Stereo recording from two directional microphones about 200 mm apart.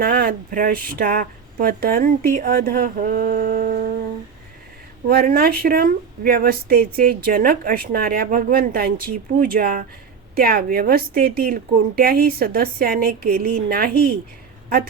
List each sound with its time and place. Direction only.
0.0 s a woman's voice: 50° right (ahead or behind)
5.0 s a woman's voice: 50° right (ahead or behind)